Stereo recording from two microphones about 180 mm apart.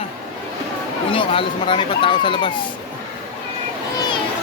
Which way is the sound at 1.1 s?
30° left (ahead or behind).